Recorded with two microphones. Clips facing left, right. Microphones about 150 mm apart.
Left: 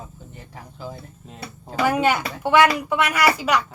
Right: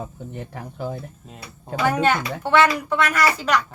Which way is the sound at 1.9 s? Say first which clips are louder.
Right 1 dB; 10° left (ahead or behind).